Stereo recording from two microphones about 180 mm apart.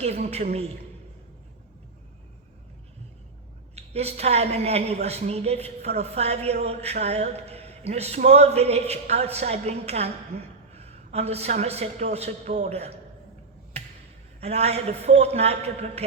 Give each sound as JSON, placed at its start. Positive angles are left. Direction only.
{"t": 0.0, "sound": "a woman's voice", "side_deg": -35}
{"t": 3.8, "sound": "a woman's voice", "side_deg": -35}
{"t": 14.4, "sound": "a woman's voice", "side_deg": -35}